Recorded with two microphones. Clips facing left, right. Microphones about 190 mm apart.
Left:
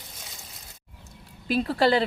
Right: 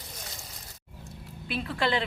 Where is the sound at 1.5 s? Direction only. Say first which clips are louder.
Left 7 dB; 40° left (ahead or behind).